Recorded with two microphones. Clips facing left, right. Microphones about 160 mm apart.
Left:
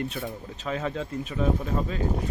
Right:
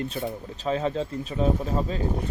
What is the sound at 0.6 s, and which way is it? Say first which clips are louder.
Speech: right 4 dB; 30° right (ahead or behind).